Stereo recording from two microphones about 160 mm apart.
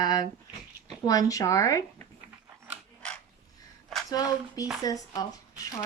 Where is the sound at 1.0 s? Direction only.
20° left (ahead or behind).